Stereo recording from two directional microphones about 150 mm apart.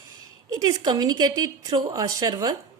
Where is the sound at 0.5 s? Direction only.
25° right (ahead or behind).